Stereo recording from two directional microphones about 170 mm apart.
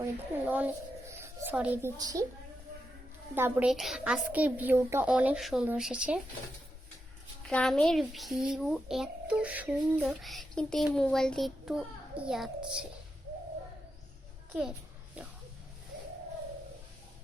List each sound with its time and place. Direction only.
0.0 s a child's voice: 10° right (ahead or behind)
2.0 s a woman's voice: 20° right (ahead or behind)
3.3 s a child's voice: 15° right (ahead or behind)
3.7 s a child's voice: centre (ahead or behind)
7.4 s a child's voice: 5° left (ahead or behind)